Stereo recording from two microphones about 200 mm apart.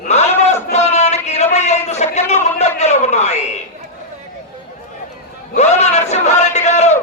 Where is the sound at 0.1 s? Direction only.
35° left (ahead or behind).